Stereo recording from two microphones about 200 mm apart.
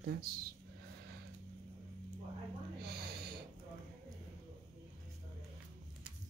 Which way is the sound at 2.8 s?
50° right (ahead or behind).